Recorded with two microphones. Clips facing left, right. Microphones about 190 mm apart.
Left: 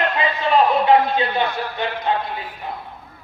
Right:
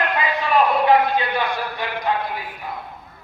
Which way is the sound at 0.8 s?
25° left (ahead or behind).